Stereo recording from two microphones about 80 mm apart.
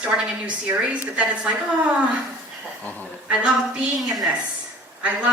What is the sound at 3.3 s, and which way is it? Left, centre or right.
A woman's voice, centre.